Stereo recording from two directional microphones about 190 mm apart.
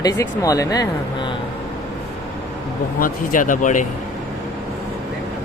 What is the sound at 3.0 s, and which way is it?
Speech, 45° left (ahead or behind).